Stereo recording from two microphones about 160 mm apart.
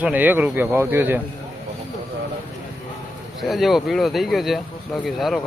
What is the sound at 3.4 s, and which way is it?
Speech, centre (ahead or behind).